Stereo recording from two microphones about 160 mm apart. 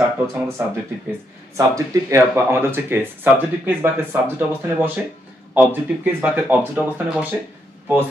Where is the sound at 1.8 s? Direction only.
20° right (ahead or behind).